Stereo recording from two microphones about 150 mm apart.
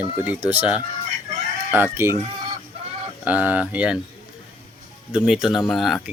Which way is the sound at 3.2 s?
10° right (ahead or behind).